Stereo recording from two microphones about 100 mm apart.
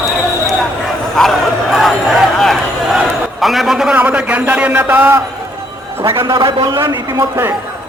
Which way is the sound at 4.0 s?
15° right (ahead or behind).